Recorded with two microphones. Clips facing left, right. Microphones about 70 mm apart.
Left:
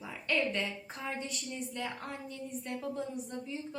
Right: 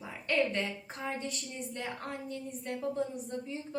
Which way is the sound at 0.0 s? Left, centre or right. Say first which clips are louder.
Right 2 dB; right.